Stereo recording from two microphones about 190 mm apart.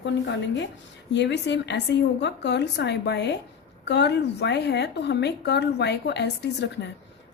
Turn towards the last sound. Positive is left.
turn(degrees=65)  # may be behind; listen again after turning